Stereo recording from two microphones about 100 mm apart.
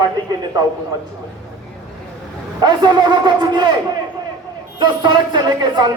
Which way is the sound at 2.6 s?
45° right (ahead or behind).